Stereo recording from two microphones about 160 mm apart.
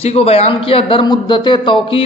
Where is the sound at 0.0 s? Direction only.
40° left (ahead or behind).